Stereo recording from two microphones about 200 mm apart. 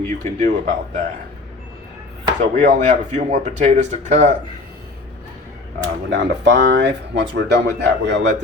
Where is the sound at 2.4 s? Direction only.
35° right (ahead or behind).